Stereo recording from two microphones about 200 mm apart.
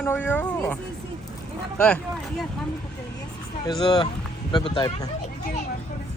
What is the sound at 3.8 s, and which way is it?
Speech, 20° left (ahead or behind).